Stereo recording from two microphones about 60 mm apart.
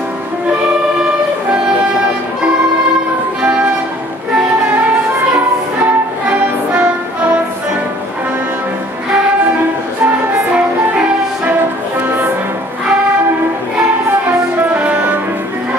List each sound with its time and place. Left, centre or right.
3.4 s music: centre
6.2 s music: centre
14.8 s music: right